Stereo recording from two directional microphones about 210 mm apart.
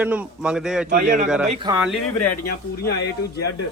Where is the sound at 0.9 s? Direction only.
35° right (ahead or behind).